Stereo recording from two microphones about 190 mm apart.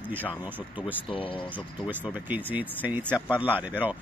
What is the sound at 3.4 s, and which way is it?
Speech, 10° right (ahead or behind).